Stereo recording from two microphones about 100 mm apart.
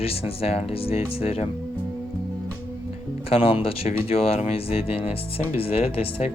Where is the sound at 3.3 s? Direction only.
75° left (ahead or behind).